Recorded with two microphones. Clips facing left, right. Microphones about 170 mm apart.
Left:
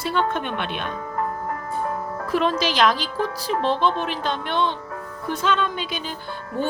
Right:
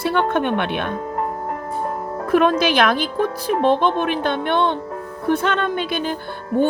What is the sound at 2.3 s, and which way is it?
A woman's voice, 55° right (ahead or behind).